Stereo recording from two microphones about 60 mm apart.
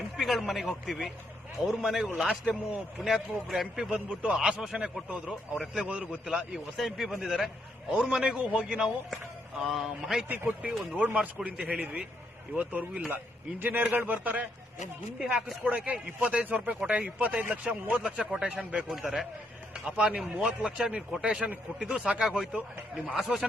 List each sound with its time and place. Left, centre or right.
0.2 s speech: centre
6.2 s speech: centre
10.2 s speech: right
15.2 s speech: centre
19.0 s a man's voice: centre